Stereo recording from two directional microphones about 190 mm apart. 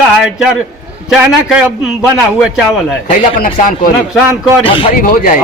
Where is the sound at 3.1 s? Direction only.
45° left (ahead or behind).